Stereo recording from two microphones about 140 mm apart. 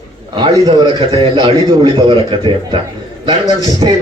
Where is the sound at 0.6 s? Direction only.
30° right (ahead or behind).